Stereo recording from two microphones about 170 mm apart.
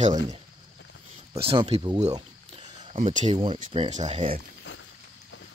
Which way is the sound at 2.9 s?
45° right (ahead or behind).